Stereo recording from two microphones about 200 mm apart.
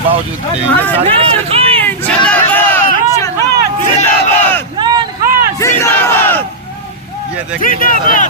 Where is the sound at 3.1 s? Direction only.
15° left (ahead or behind).